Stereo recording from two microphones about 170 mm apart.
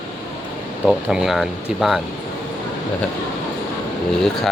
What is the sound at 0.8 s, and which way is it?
Speech, 5° right (ahead or behind).